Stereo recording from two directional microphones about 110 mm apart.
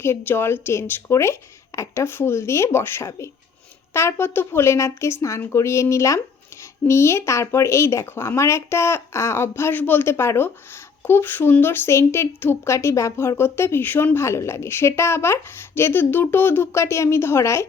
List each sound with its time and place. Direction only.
0.0 s a woman's voice: 20° left (ahead or behind)